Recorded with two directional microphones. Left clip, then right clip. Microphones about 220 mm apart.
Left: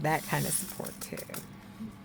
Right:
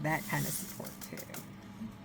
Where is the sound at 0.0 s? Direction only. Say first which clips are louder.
Left 4 dB; 45° left (ahead or behind).